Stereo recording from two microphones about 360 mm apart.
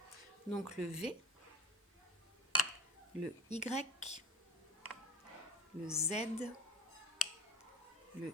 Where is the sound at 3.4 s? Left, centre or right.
Centre.